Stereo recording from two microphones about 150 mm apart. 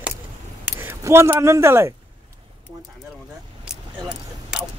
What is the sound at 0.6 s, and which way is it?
Speech, 15° right (ahead or behind).